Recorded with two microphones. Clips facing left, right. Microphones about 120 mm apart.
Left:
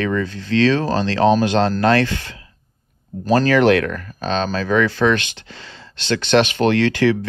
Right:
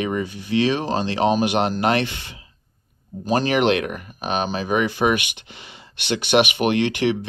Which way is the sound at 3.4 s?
20° right (ahead or behind).